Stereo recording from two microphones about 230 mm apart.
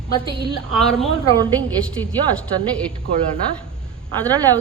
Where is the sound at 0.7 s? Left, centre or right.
Centre.